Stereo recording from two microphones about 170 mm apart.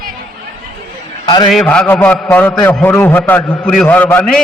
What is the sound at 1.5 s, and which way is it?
A man's voice, 5° left (ahead or behind).